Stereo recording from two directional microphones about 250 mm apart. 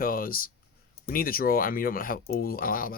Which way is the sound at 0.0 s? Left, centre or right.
Left.